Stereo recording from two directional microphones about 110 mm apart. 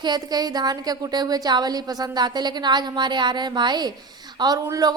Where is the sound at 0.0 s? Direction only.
40° right (ahead or behind).